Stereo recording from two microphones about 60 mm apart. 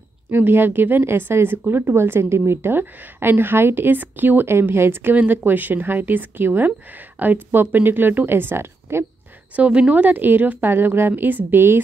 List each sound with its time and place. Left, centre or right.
0.3 s a woman's voice: right
4.6 s a woman's voice: right
5.1 s a woman's voice: right
9.6 s a woman's voice: right